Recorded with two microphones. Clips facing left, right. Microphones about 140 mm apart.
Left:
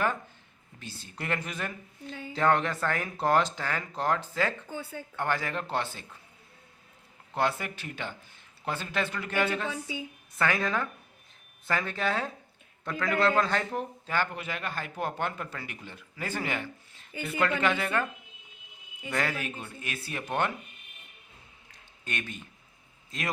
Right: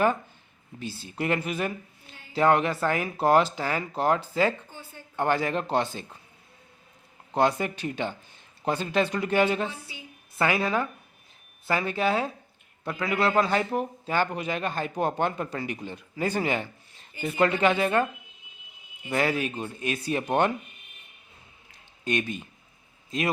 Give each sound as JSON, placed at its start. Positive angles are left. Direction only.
{"t": 0.8, "sound": "speech", "side_deg": -10}
{"t": 7.3, "sound": "a man's voice", "side_deg": -20}
{"t": 19.1, "sound": "a man's voice", "side_deg": -15}
{"t": 22.0, "sound": "speech", "side_deg": -15}